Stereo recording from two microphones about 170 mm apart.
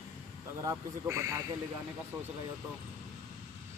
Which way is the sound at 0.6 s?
20° right (ahead or behind).